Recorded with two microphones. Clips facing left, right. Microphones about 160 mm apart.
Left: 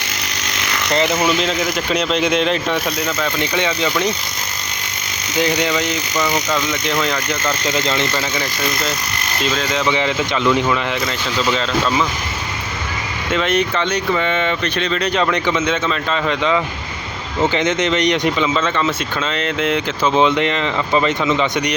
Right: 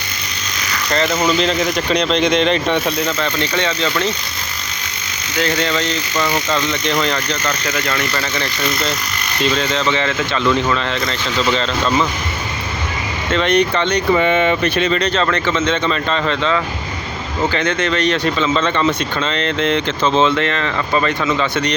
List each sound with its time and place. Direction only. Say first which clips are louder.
0.9 s speech: right 1 dB; 15° left (ahead or behind)
5.4 s speech: left 1 dB; 15° left (ahead or behind)
7.6 s speech: left 2 dB; 20° left (ahead or behind)
9.4 s speech: right 2 dB; centre (ahead or behind)
9.8 s speech: even; 15° left (ahead or behind)
13.3 s speech: right 3 dB; 5° left (ahead or behind)
14.1 s speech: right 7 dB; 10° right (ahead or behind)
14.9 s speech: right 1 dB; 10° left (ahead or behind)
18.5 s speech: right 2 dB; 5° left (ahead or behind)